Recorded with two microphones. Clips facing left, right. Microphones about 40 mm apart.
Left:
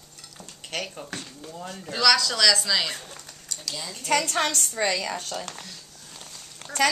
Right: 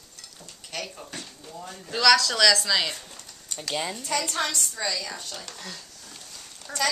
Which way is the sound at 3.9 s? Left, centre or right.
Left.